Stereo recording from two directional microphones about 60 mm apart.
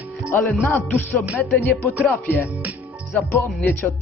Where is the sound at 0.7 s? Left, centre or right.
Left.